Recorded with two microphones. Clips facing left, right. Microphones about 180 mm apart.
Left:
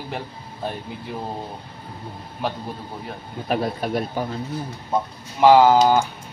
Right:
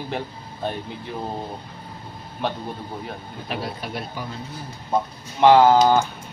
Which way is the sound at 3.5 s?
45° left (ahead or behind).